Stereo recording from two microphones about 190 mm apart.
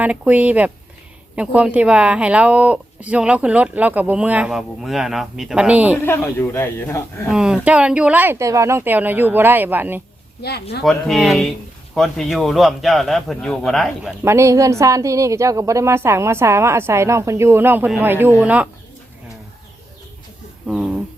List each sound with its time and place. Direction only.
0.0 s speech: 10° right (ahead or behind)
6.0 s a man's voice: 10° left (ahead or behind)
7.3 s speech: 5° right (ahead or behind)
10.4 s speech: 60° left (ahead or behind)
10.8 s a man's voice: centre (ahead or behind)
14.3 s speech: 15° right (ahead or behind)
20.7 s speech: centre (ahead or behind)